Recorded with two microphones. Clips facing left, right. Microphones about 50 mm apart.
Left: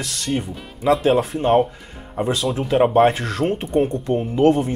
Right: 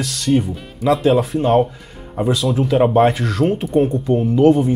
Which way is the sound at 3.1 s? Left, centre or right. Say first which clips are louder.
Right 4 dB; left.